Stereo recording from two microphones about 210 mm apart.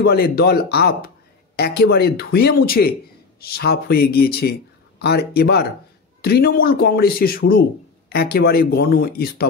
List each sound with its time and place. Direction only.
0.0 s a man's voice: 50° left (ahead or behind)